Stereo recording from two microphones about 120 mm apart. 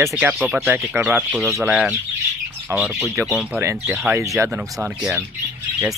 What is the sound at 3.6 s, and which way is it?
Speech, 20° right (ahead or behind).